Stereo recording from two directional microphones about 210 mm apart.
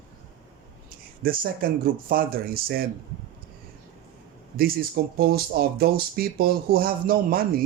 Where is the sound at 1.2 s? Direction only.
45° right (ahead or behind).